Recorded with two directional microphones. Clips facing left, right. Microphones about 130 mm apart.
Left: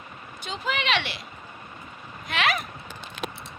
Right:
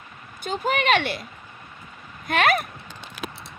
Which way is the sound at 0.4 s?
50° right (ahead or behind).